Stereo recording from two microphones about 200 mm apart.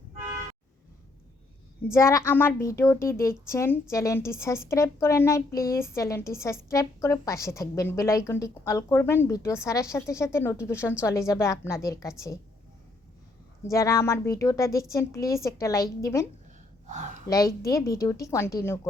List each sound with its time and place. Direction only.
1.8 s a woman's voice: 15° left (ahead or behind)
13.7 s a woman's voice: 15° left (ahead or behind)
16.8 s speech: 35° right (ahead or behind)
17.2 s a woman's voice: 15° left (ahead or behind)